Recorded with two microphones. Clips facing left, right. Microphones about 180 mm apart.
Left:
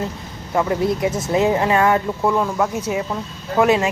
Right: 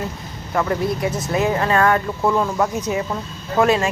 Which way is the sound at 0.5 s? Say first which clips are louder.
Left 2 dB; 20° left (ahead or behind).